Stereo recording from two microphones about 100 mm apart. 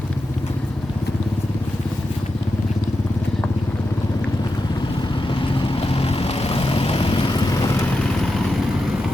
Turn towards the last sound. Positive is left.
turn(degrees=40)  # may be behind; listen again after turning